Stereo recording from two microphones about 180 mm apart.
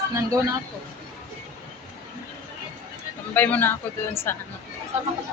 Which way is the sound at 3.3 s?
10° left (ahead or behind).